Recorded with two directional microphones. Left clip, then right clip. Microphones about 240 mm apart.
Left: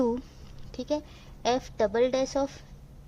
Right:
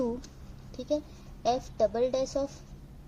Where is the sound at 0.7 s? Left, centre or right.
Left.